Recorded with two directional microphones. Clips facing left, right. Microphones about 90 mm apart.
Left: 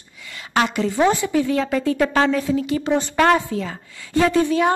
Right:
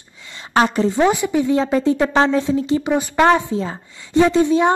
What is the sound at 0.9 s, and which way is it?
A woman's voice, 20° right (ahead or behind).